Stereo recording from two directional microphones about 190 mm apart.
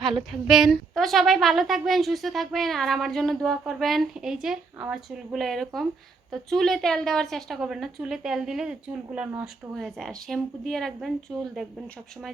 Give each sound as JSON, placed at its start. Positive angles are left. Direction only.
{"t": 0.3, "sound": "a woman's voice", "side_deg": 0}